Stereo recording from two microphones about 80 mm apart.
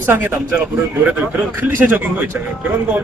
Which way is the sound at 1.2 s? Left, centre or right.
Right.